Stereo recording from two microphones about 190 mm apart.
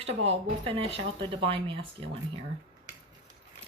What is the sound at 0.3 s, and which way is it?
A woman's voice, 30° right (ahead or behind).